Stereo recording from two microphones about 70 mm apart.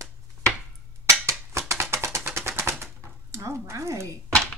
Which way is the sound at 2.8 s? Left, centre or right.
Right.